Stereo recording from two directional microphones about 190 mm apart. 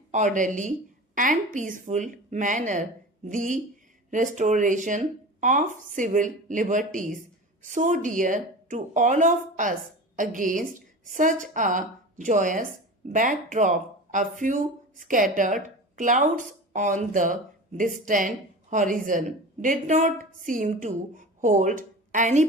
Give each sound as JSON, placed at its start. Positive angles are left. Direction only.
{"t": 0.1, "sound": "a woman's voice", "side_deg": -40}